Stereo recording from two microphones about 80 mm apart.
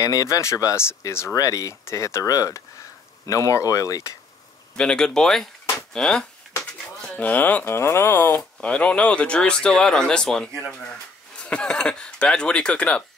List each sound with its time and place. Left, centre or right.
0.0 s speech: left
4.7 s speech: centre; by 8.4 s left
8.5 s speech: centre